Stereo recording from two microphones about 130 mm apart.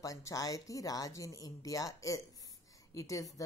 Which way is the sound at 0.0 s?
25° left (ahead or behind).